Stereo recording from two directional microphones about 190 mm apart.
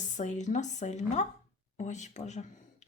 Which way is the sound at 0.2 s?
40° left (ahead or behind).